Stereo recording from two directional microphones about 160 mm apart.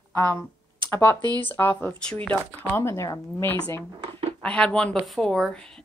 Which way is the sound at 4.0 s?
35° right (ahead or behind).